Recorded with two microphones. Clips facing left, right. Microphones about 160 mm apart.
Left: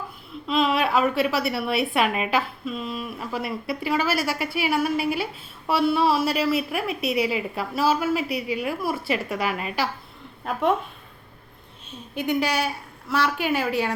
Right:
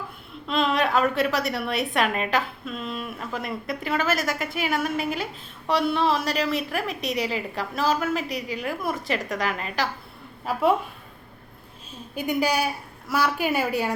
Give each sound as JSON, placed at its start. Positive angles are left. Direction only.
{"t": 0.4, "sound": "a woman's voice", "side_deg": 5}
{"t": 8.3, "sound": "a woman's voice", "side_deg": -35}
{"t": 8.5, "sound": "a woman's voice", "side_deg": 5}
{"t": 10.4, "sound": "a woman's voice", "side_deg": -5}
{"t": 12.1, "sound": "a woman's voice", "side_deg": -10}